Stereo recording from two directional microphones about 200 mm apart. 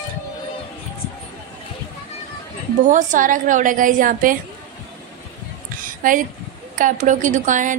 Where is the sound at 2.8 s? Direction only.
40° right (ahead or behind).